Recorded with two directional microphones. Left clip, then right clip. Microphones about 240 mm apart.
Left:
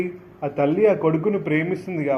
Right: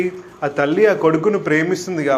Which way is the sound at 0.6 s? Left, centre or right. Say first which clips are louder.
Right 4 dB; right.